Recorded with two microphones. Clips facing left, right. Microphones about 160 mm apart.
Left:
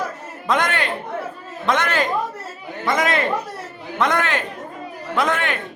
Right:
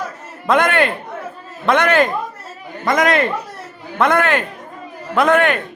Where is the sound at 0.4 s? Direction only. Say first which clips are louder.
Right 6 dB; 60° right (ahead or behind).